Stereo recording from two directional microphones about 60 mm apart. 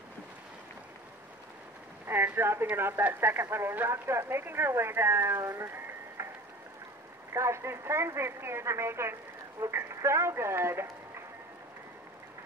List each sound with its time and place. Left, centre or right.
2.0 s speech: right
7.3 s a man's voice: right